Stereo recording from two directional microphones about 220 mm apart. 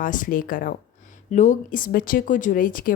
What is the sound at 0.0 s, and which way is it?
Speech, 35° left (ahead or behind).